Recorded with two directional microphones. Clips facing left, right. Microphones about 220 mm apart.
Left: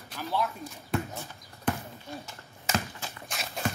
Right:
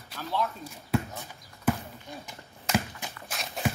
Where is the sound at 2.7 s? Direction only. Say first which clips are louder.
Right 3 dB; 10° right (ahead or behind).